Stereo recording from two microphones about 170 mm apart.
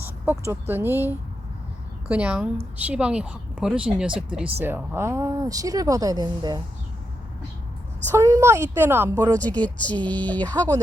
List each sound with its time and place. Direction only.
0.0 s speech: 10° right (ahead or behind)
8.1 s speech: 15° right (ahead or behind)
9.4 s speech: 10° left (ahead or behind)